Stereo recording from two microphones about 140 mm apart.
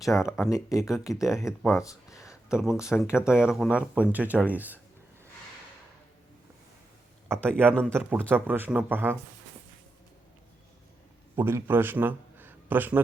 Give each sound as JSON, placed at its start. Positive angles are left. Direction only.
{"t": 0.1, "sound": "speech", "side_deg": 10}
{"t": 0.5, "sound": "speech", "side_deg": 20}
{"t": 1.8, "sound": "a sound", "side_deg": 25}
{"t": 2.3, "sound": "a sound", "side_deg": -5}
{"t": 2.9, "sound": "speech", "side_deg": -5}
{"t": 7.3, "sound": "speech", "side_deg": 5}
{"t": 7.9, "sound": "speech", "side_deg": -15}
{"t": 11.3, "sound": "a man's voice", "side_deg": -15}